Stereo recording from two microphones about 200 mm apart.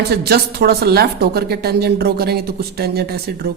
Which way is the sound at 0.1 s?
50° right (ahead or behind).